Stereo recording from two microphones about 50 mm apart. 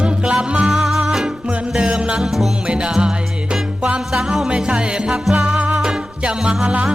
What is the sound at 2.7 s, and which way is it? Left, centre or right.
Music, centre.